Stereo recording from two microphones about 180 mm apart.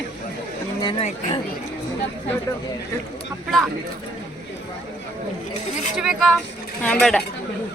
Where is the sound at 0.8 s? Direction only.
25° left (ahead or behind).